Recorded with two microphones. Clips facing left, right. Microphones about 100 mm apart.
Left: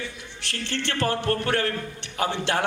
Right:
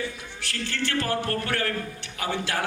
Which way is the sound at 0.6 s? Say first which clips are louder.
Left 2 dB; 25° left (ahead or behind).